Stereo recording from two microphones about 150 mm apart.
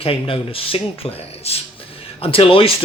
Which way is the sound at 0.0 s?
40° left (ahead or behind).